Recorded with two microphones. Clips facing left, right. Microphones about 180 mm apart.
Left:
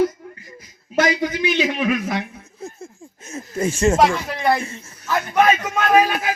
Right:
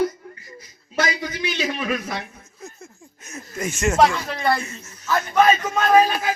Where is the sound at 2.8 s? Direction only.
30° left (ahead or behind).